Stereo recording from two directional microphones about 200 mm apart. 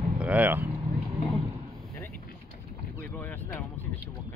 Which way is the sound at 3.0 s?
10° left (ahead or behind).